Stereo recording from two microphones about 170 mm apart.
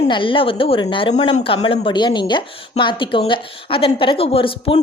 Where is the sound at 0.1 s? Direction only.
30° left (ahead or behind).